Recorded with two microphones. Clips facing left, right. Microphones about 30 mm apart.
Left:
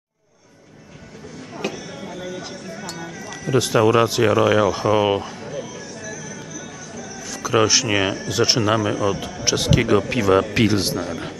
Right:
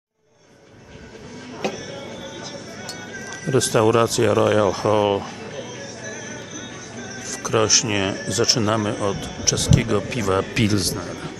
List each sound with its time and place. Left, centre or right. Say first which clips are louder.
1.6 s music: right 1 dB; centre
2.2 s speech: left 2 dB; centre
5.7 s music: even; centre
7.2 s speech: left 2 dB; centre